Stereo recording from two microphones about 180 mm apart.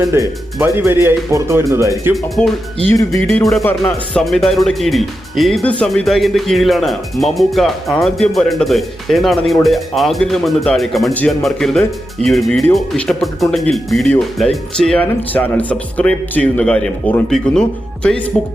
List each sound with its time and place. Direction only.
0.0 s speech: 15° right (ahead or behind)
2.4 s speech: 5° left (ahead or behind)
3.6 s speech: 10° left (ahead or behind)